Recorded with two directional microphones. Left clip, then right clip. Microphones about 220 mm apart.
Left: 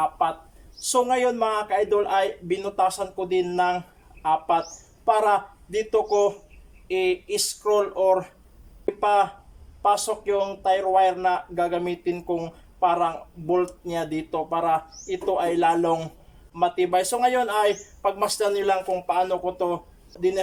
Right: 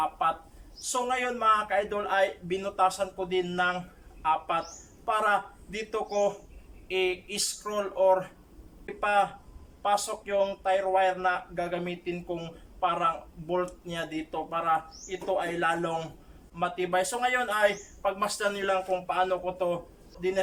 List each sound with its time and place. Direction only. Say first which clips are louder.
0.2 s a man's voice: left 4 dB; 15° left (ahead or behind)